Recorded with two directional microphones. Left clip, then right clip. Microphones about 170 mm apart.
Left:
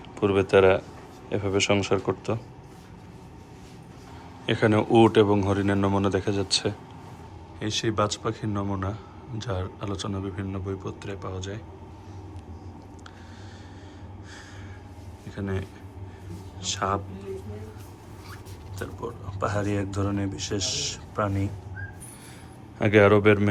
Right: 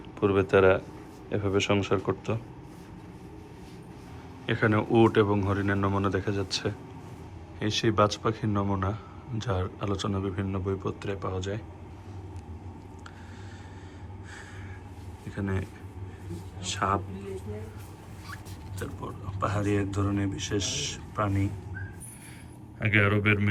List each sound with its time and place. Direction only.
0.2 s speech: 5° left (ahead or behind)
4.4 s speech: 10° left (ahead or behind)
15.4 s speech: 5° left (ahead or behind)
16.6 s speech: 5° left (ahead or behind)
18.8 s speech: 10° left (ahead or behind)
22.8 s speech: 15° left (ahead or behind)